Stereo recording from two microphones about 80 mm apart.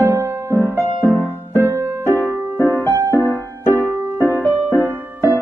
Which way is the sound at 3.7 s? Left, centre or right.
Right.